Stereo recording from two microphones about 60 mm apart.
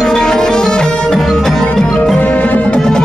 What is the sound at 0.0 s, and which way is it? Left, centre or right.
Music, centre.